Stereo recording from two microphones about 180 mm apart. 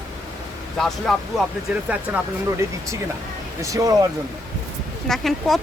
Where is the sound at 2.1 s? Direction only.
10° right (ahead or behind).